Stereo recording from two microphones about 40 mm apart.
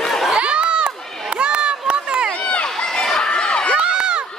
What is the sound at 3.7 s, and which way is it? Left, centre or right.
Run, right.